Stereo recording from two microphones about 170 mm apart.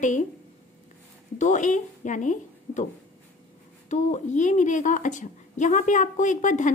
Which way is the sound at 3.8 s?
45° left (ahead or behind).